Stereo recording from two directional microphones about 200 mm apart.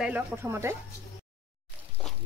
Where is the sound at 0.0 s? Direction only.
10° right (ahead or behind).